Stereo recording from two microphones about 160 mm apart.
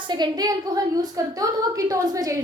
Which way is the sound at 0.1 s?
25° right (ahead or behind).